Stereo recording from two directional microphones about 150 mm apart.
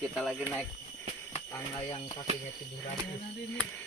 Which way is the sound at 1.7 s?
35° left (ahead or behind).